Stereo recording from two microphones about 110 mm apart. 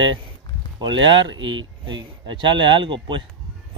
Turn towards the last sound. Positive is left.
turn(degrees=-50)  # may be behind; listen again after turning